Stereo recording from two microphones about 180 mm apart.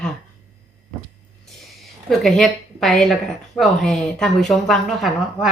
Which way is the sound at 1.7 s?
Centre (ahead or behind).